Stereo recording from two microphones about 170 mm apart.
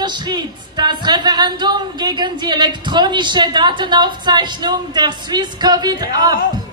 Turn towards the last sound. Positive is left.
turn(degrees=-25)  # may be behind; listen again after turning